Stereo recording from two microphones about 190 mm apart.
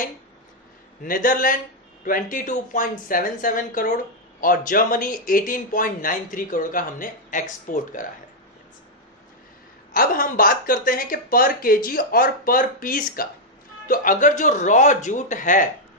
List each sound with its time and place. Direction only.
1.0 s speech: 45° left (ahead or behind)
9.9 s speech: 45° left (ahead or behind)